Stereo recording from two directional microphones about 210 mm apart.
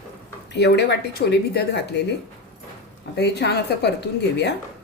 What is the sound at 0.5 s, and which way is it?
Speech, 55° left (ahead or behind).